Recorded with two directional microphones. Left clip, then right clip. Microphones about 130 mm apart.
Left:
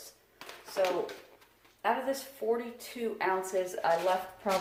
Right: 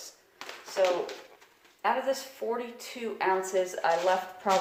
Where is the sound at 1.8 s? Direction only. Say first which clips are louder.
Right 3 dB; 30° right (ahead or behind).